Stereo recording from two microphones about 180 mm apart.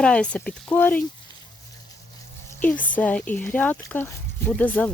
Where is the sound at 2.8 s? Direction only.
10° left (ahead or behind).